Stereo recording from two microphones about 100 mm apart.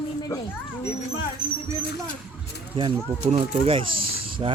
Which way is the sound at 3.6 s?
65° right (ahead or behind).